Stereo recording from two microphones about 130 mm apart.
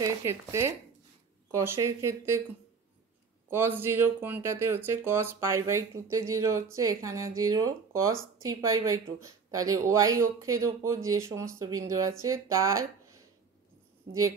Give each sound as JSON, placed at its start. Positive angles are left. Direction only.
{"t": 0.0, "sound": "speech", "side_deg": -25}
{"t": 3.4, "sound": "speech", "side_deg": -15}